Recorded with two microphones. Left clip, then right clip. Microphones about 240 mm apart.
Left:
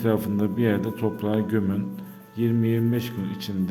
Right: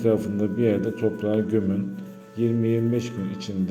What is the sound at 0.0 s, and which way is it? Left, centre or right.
Speech, left.